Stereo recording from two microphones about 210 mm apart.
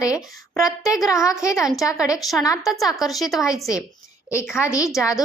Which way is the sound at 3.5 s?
15° left (ahead or behind).